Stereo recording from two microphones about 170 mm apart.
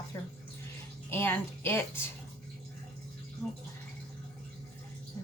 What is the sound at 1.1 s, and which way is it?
Speech, 15° left (ahead or behind).